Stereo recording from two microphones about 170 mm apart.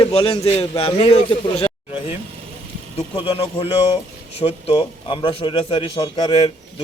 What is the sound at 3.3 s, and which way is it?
A man's voice, 35° left (ahead or behind).